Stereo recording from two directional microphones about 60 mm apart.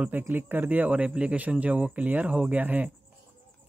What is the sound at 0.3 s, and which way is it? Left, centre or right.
Speech, right.